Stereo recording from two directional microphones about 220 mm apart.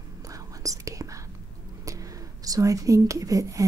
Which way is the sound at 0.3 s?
15° right (ahead or behind).